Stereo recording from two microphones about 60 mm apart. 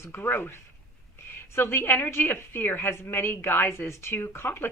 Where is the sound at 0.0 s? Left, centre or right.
Left.